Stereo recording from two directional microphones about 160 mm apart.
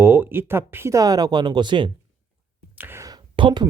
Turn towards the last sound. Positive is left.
turn(degrees=-30)  # may be behind; listen again after turning